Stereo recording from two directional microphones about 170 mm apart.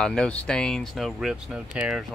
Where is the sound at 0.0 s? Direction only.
5° left (ahead or behind).